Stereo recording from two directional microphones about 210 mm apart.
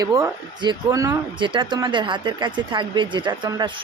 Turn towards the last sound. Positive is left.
turn(degrees=-20)  # may be behind; listen again after turning